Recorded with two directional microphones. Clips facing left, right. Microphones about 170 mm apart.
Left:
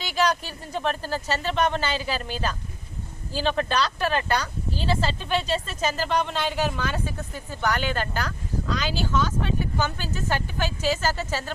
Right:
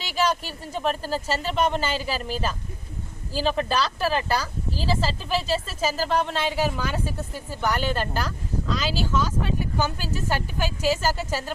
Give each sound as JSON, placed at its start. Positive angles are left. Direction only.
{"t": 0.1, "sound": "speech", "side_deg": -5}